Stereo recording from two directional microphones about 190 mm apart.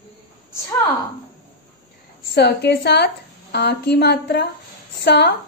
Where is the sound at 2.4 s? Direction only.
60° left (ahead or behind).